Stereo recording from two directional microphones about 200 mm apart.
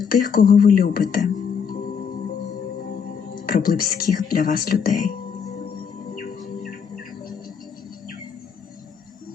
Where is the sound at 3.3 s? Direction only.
50° left (ahead or behind).